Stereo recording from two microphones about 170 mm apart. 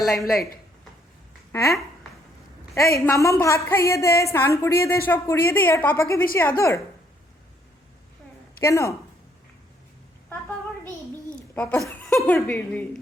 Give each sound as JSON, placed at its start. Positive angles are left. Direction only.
{"t": 0.0, "sound": "speech", "side_deg": 0}
{"t": 1.5, "sound": "a woman's voice", "side_deg": 20}
{"t": 8.6, "sound": "a woman's voice", "side_deg": 15}
{"t": 11.3, "sound": "a sound", "side_deg": 10}
{"t": 12.0, "sound": "speech", "side_deg": 5}